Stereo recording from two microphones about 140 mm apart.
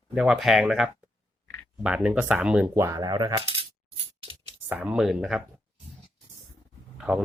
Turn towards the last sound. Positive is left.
turn(degrees=-5)  # may be behind; listen again after turning